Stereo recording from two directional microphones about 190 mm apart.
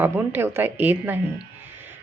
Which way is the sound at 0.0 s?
10° right (ahead or behind).